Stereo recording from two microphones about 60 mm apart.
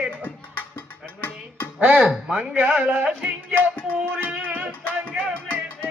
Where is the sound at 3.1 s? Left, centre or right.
Centre.